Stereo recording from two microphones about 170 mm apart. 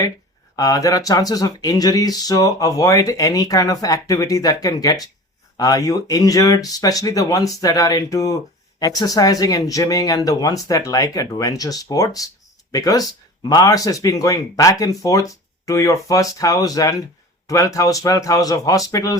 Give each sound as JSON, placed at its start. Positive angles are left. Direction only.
{"t": 0.5, "sound": "speech", "side_deg": 20}